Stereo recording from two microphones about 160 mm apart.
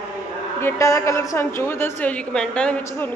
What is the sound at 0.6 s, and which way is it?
A woman's voice, 15° left (ahead or behind).